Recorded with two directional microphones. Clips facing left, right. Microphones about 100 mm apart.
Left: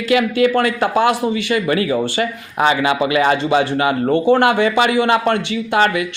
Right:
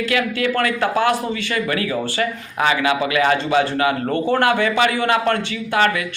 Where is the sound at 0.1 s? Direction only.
20° left (ahead or behind).